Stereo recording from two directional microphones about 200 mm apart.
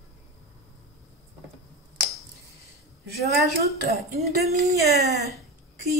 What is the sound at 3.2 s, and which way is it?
Speech, 55° right (ahead or behind).